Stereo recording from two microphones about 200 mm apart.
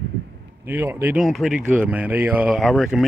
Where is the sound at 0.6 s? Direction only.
10° right (ahead or behind).